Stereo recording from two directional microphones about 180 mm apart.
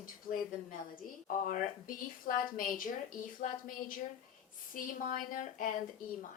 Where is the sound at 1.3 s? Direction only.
45° left (ahead or behind).